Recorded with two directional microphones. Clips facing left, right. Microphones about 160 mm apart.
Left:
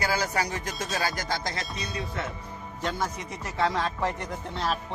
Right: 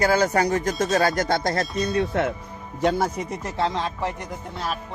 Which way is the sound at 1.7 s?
Centre (ahead or behind).